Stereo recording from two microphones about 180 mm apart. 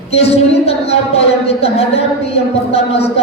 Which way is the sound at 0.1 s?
35° left (ahead or behind).